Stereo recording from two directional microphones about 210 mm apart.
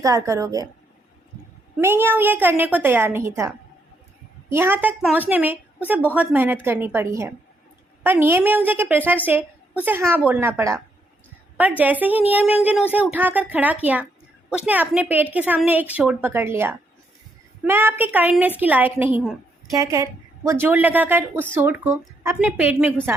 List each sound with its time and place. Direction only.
0.0 s a woman's voice: 15° right (ahead or behind)
1.8 s a woman's voice: 10° right (ahead or behind)
4.5 s a woman's voice: 10° right (ahead or behind)
11.8 s a woman's voice: 10° right (ahead or behind)
19.7 s a woman's voice: 15° right (ahead or behind)